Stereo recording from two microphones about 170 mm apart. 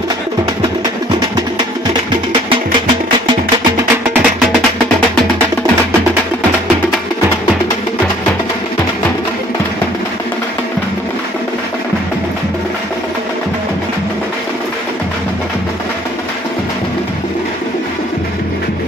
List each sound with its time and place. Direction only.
4.1 s music: 5° right (ahead or behind)